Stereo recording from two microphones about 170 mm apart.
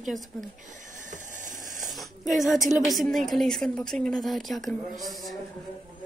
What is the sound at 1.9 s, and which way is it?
A woman's voice, centre (ahead or behind).